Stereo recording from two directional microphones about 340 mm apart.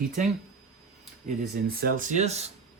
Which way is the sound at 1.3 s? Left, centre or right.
Right.